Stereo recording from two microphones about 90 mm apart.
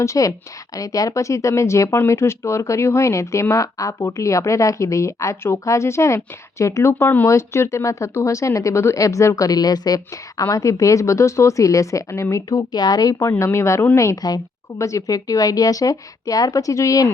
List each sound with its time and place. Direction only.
0.0 s speech: 35° left (ahead or behind)
12.5 s speech: 45° left (ahead or behind)
14.2 s speech: 45° left (ahead or behind)